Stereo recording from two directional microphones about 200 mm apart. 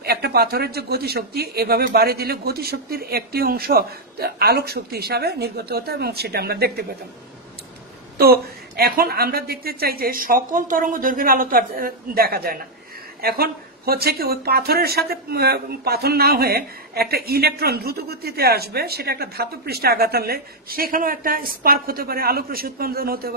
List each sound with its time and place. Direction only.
0.0 s speech: 50° right (ahead or behind)
8.2 s speech: 50° right (ahead or behind)